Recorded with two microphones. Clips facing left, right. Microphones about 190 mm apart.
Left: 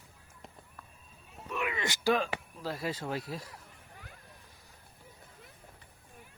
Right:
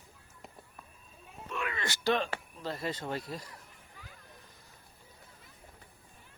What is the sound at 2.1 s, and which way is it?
Speech, 5° left (ahead or behind).